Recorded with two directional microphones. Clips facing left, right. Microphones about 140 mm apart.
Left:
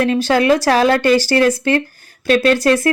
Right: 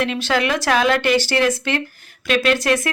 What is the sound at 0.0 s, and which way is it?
Speech, 40° left (ahead or behind).